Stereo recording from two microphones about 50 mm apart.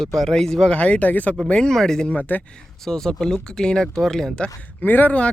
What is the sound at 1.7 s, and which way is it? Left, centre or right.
Speech, centre.